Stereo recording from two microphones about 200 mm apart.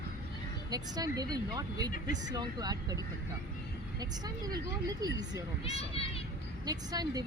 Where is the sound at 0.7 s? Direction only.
20° right (ahead or behind).